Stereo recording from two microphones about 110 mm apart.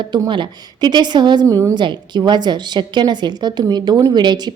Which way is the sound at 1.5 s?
30° right (ahead or behind).